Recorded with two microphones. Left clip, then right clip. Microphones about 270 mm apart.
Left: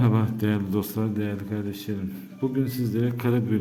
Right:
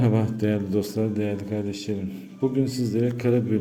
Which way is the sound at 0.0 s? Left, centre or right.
Centre.